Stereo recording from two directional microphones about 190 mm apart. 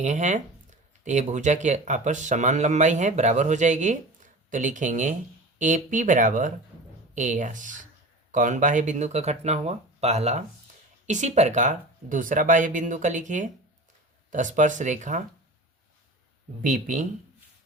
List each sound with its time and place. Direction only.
0.0 s speech: 40° right (ahead or behind)
16.6 s speech: 45° right (ahead or behind)